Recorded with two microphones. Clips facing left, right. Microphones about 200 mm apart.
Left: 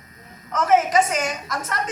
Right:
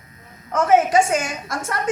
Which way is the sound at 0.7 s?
30° right (ahead or behind).